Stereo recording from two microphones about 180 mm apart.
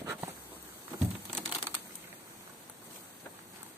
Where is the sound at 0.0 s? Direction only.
15° right (ahead or behind).